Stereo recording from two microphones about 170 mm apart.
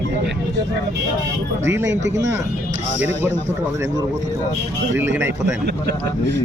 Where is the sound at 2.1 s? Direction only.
15° right (ahead or behind).